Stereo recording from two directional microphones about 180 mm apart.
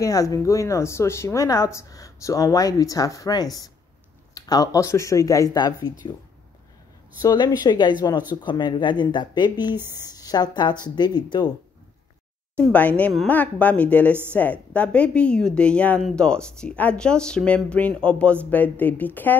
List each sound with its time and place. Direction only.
0.0 s a woman's voice: 20° left (ahead or behind)
7.2 s a woman's voice: 20° left (ahead or behind)
12.5 s a woman's voice: 10° left (ahead or behind)